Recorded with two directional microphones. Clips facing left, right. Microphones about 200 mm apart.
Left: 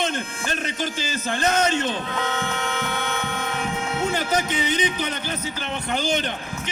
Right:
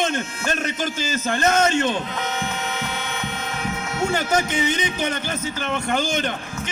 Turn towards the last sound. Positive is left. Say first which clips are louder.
# right 2 dB
turn(degrees=-45)  # may be behind; listen again after turning